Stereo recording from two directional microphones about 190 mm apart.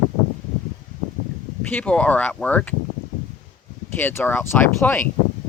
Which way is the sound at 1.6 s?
10° left (ahead or behind).